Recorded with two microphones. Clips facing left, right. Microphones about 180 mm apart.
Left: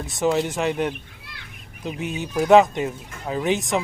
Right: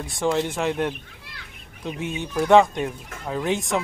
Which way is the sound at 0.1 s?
5° left (ahead or behind).